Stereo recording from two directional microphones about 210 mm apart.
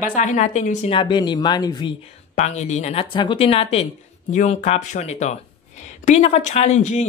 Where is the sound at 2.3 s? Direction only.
35° left (ahead or behind).